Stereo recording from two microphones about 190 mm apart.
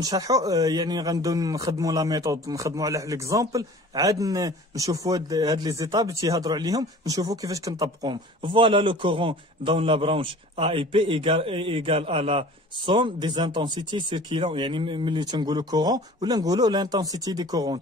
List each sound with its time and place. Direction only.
0.0 s a man's voice: 20° right (ahead or behind)